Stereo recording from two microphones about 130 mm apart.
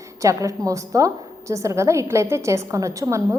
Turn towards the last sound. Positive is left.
turn(degrees=-25)  # may be behind; listen again after turning